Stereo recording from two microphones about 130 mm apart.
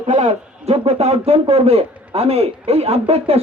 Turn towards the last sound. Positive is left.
turn(degrees=-50)  # may be behind; listen again after turning